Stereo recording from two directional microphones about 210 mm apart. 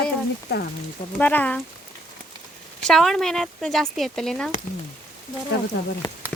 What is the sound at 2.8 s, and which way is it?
Speech, centre (ahead or behind).